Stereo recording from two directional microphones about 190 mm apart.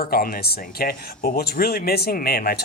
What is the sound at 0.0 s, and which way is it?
Speech, 50° left (ahead or behind).